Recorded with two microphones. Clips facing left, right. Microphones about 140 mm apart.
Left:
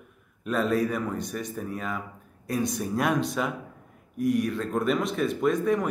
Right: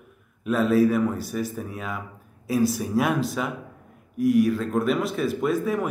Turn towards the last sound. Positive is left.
turn(degrees=-5)  # may be behind; listen again after turning